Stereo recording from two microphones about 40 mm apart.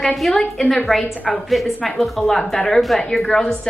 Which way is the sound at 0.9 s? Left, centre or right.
Centre.